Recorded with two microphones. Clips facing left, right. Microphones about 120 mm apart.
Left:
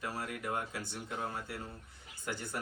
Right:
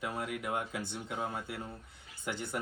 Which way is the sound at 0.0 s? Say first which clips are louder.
Right 2 dB; 20° right (ahead or behind).